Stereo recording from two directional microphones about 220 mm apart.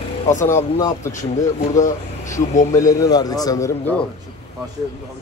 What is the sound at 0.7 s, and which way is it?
Speech, 15° left (ahead or behind).